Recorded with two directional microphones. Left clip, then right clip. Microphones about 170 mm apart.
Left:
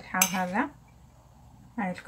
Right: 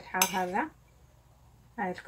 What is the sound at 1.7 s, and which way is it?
Speech, 25° right (ahead or behind).